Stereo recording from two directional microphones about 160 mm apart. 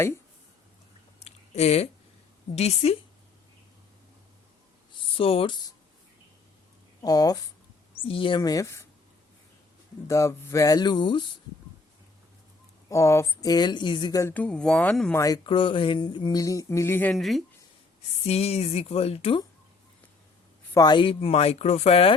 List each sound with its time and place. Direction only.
1.2 s a sound: 40° left (ahead or behind)
2.6 s speech: 40° left (ahead or behind)
4.9 s a sound: 35° left (ahead or behind)
7.0 s speech: 25° left (ahead or behind)
8.0 s speech: 35° left (ahead or behind); by 8.9 s 20° left (ahead or behind)
10.1 s speech: 20° left (ahead or behind)
12.9 s speech: 20° left (ahead or behind)
15.1 s speech: 20° left (ahead or behind)
15.4 s speech: 30° left (ahead or behind); by 17.2 s 15° left (ahead or behind)
17.2 s speech: centre (ahead or behind)
18.3 s speech: 40° left (ahead or behind)
20.7 s speech: 30° left (ahead or behind)